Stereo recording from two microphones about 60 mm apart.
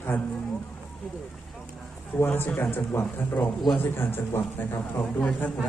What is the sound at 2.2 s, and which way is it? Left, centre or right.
Speech, left.